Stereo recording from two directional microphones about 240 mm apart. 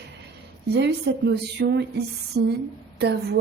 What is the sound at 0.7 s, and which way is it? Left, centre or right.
A woman's voice, right.